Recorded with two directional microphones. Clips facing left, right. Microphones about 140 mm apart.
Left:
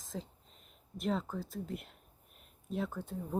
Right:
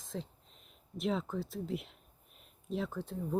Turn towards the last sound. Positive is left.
turn(degrees=5)  # may be behind; listen again after turning